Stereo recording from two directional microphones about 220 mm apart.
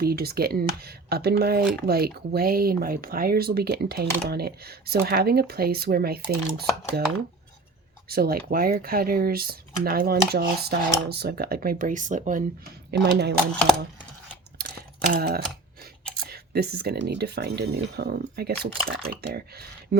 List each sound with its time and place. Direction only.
0.0 s speech: 45° right (ahead or behind)
8.0 s speech: 45° right (ahead or behind)
12.9 s speech: 50° right (ahead or behind)
15.1 s speech: 45° right (ahead or behind)